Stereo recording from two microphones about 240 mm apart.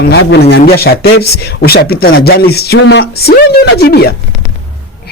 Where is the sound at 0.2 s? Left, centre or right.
Left.